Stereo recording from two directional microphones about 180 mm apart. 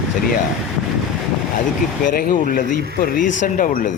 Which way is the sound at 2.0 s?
50° left (ahead or behind).